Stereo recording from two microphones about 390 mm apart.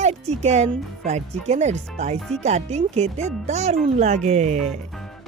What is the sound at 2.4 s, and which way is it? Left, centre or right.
Speech, centre.